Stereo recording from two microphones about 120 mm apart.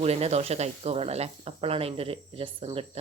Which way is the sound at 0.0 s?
60° right (ahead or behind).